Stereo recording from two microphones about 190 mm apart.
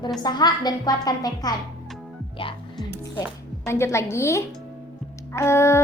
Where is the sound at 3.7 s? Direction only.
15° left (ahead or behind).